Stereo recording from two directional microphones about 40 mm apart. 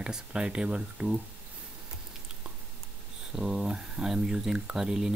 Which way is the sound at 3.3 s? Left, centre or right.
Centre.